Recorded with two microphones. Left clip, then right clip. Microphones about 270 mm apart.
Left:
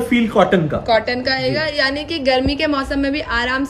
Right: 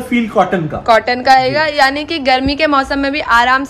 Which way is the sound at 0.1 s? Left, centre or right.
Centre.